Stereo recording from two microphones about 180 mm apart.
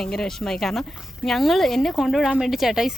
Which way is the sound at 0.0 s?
5° left (ahead or behind).